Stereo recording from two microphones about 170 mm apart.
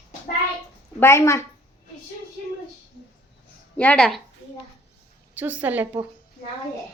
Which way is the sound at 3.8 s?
5° left (ahead or behind).